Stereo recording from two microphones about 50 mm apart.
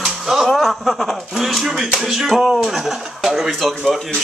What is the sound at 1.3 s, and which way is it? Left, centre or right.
Speech, centre.